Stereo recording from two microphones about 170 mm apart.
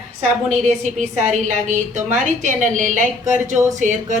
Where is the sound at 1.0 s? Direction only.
45° right (ahead or behind).